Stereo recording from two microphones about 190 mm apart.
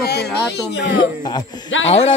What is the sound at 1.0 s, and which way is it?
Speech, 20° left (ahead or behind).